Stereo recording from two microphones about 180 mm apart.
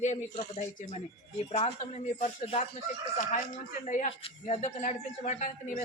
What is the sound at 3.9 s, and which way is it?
A woman's voice, 45° left (ahead or behind).